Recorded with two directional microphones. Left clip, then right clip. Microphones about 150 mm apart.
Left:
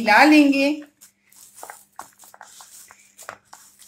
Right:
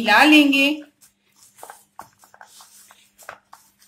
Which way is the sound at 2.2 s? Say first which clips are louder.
Left 1 dB; 15° left (ahead or behind).